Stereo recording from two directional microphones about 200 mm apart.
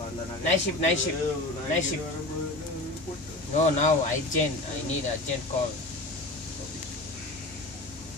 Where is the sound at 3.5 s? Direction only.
35° left (ahead or behind).